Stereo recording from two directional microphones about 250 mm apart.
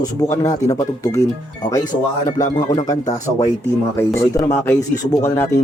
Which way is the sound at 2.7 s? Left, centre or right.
Centre.